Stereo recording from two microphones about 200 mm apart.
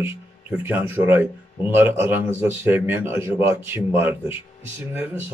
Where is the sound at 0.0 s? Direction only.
10° right (ahead or behind).